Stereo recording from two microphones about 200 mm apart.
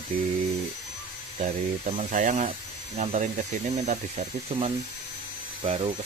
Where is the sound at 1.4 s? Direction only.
35° right (ahead or behind).